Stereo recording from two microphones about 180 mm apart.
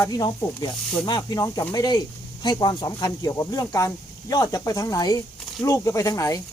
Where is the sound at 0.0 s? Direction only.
20° left (ahead or behind).